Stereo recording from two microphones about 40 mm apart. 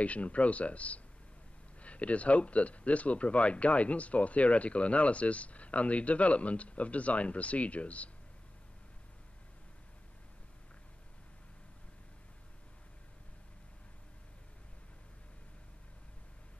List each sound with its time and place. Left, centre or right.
0.0 s speech: left